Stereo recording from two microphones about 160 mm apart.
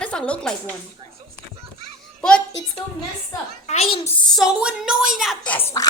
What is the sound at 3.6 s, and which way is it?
Speech, 40° left (ahead or behind).